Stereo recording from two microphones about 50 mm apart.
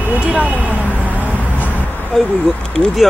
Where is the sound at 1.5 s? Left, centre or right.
Left.